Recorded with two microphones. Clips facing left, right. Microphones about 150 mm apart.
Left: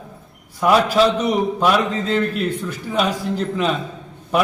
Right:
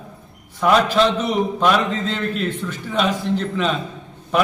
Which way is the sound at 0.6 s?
5° left (ahead or behind).